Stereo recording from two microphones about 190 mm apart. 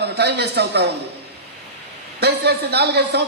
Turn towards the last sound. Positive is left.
turn(degrees=-60)  # may be behind; listen again after turning